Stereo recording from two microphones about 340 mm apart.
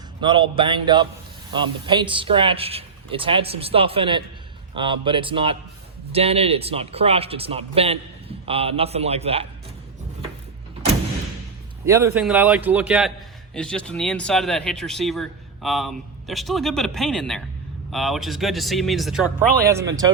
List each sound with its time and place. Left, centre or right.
0.2 s speech: centre
11.9 s a man's voice: centre